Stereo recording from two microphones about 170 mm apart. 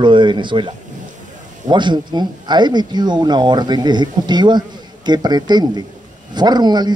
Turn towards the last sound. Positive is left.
turn(degrees=-25)  # may be behind; listen again after turning